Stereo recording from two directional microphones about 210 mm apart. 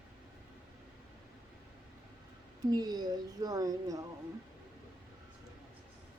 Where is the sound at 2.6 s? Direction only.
20° right (ahead or behind).